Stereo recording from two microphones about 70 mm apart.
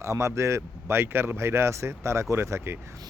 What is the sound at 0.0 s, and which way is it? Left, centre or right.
A man's voice, right.